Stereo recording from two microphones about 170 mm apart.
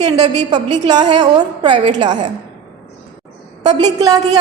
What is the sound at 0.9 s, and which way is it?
Speech, 25° right (ahead or behind).